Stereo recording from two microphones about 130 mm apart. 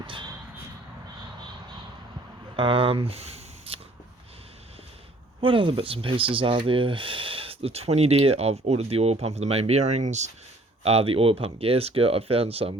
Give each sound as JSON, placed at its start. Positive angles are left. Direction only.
{"t": 0.0, "sound": "a sound", "side_deg": -40}
{"t": 2.6, "sound": "speech", "side_deg": -40}
{"t": 5.4, "sound": "speech", "side_deg": -40}
{"t": 10.8, "sound": "speech", "side_deg": -50}